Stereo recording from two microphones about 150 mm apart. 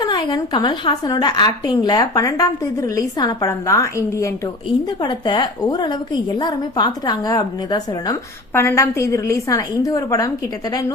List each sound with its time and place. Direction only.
0.0 s a woman's voice: 30° left (ahead or behind)
4.9 s a woman's voice: 30° left (ahead or behind)